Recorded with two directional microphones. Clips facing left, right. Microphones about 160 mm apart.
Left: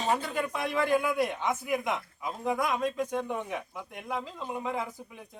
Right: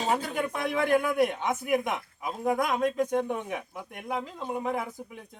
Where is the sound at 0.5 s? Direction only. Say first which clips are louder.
Right 2 dB; 55° right (ahead or behind).